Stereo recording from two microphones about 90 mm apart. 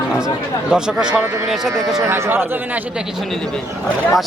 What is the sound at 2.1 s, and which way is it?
Speech, 25° right (ahead or behind).